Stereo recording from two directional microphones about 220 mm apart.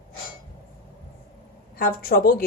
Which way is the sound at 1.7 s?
40° left (ahead or behind).